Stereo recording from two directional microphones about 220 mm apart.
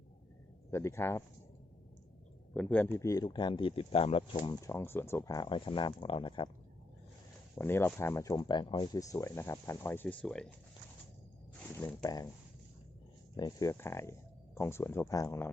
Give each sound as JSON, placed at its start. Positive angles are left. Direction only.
{"t": 0.7, "sound": "speech", "side_deg": 10}
{"t": 2.6, "sound": "speech", "side_deg": 5}
{"t": 4.6, "sound": "speech", "side_deg": 10}
{"t": 7.5, "sound": "speech", "side_deg": 10}
{"t": 11.7, "sound": "speech", "side_deg": 5}
{"t": 12.0, "sound": "speech", "side_deg": 15}
{"t": 13.3, "sound": "speech", "side_deg": 15}